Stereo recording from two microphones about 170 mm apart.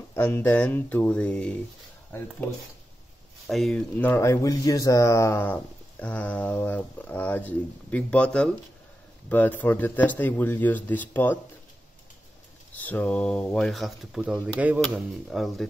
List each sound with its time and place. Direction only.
0.1 s speech: 15° left (ahead or behind)
3.4 s speech: centre (ahead or behind)
4.0 s speech: 15° left (ahead or behind)
12.7 s speech: 10° left (ahead or behind)